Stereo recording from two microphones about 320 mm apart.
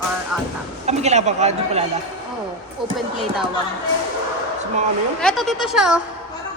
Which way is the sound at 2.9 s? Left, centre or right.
Centre.